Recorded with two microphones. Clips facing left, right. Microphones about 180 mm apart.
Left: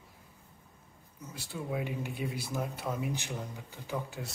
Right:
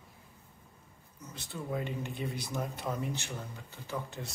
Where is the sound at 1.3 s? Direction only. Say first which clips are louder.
Left 1 dB; 10° left (ahead or behind).